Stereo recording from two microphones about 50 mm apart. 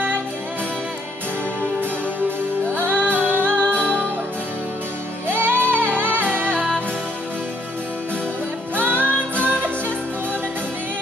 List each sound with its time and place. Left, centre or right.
2.6 s music: right
5.3 s music: right
8.7 s music: right